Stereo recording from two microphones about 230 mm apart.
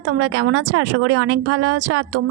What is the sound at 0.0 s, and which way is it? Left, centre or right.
A woman's voice, right.